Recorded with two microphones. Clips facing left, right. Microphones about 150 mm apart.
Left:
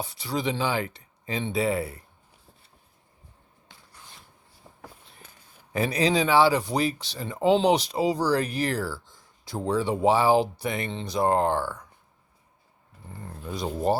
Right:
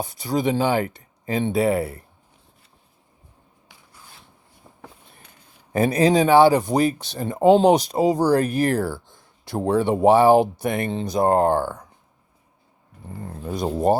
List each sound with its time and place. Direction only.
0.0 s speech: 45° right (ahead or behind)
5.7 s speech: 50° right (ahead or behind)
13.4 s speech: 45° right (ahead or behind)